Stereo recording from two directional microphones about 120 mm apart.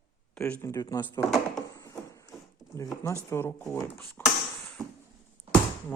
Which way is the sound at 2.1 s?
25° left (ahead or behind).